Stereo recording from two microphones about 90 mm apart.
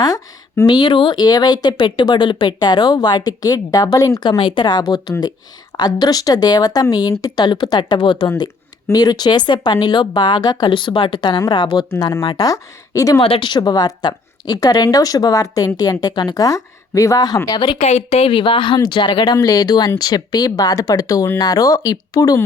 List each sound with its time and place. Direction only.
0.7 s a woman's voice: 60° left (ahead or behind); by 4.2 s 40° left (ahead or behind)
4.2 s a woman's voice: 60° left (ahead or behind)
8.9 s a woman's voice: 45° left (ahead or behind)
11.9 s a woman's voice: 40° left (ahead or behind)
13.1 s speech: 75° left (ahead or behind)
13.5 s a woman's voice: 50° left (ahead or behind)
17.7 s a woman's voice: 85° left; by 22.4 s 45° left (ahead or behind)